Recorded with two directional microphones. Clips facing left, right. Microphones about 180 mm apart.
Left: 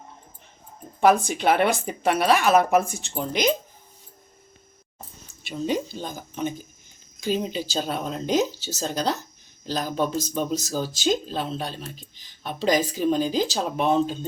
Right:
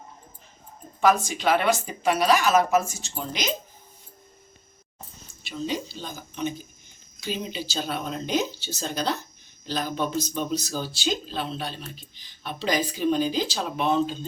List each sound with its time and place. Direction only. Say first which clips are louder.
1.0 s speech: left 3 dB; 55° left (ahead or behind)
5.6 s speech: left 4 dB; 50° left (ahead or behind)